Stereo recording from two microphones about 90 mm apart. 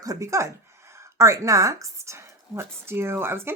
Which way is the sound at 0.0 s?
40° right (ahead or behind).